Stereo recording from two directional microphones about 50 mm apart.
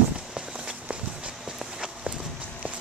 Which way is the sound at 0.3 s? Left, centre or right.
Centre.